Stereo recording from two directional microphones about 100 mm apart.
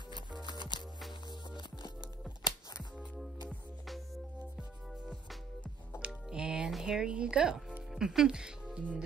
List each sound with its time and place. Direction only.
0.1 s music: 50° left (ahead or behind)
3.4 s music: centre (ahead or behind)
5.9 s music: 10° right (ahead or behind)
7.9 s speech: 5° right (ahead or behind)